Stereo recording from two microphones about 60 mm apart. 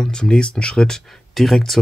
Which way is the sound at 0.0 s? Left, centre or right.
Centre.